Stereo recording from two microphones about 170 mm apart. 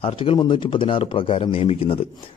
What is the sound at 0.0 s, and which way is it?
Speech, 30° left (ahead or behind).